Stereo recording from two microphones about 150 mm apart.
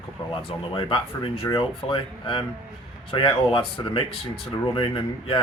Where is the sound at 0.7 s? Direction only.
35° left (ahead or behind).